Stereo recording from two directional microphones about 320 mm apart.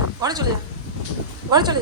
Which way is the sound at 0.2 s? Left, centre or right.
Centre.